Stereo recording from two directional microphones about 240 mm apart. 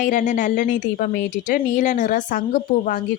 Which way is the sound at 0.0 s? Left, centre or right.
Left.